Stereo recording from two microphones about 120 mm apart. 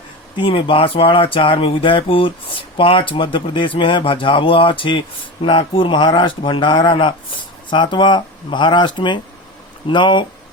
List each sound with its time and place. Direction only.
0.3 s speech: 45° left (ahead or behind)